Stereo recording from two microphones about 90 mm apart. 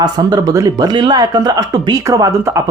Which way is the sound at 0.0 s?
45° right (ahead or behind).